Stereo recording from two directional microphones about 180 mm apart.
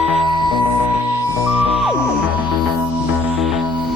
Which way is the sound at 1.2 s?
20° right (ahead or behind).